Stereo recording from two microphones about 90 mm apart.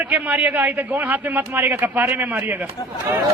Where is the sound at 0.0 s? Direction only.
15° right (ahead or behind).